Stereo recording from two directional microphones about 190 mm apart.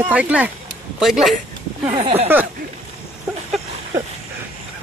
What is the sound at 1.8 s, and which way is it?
Speech, 35° right (ahead or behind).